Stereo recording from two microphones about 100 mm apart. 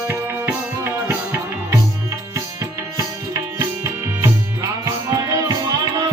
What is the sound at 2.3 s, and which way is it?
Music, 30° right (ahead or behind).